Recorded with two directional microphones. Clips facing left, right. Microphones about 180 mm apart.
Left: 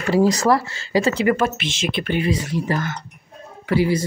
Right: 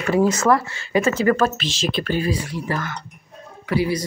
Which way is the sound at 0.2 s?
35° left (ahead or behind).